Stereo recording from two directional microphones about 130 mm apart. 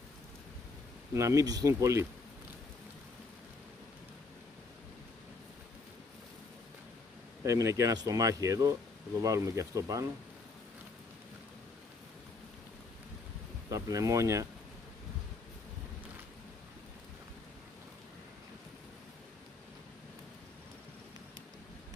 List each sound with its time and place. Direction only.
1.1 s speech: 25° right (ahead or behind)
7.4 s speech: 25° right (ahead or behind)
13.7 s speech: 25° right (ahead or behind)